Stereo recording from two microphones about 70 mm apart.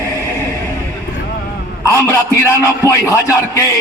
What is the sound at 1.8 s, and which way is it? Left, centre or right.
A man's voice, left.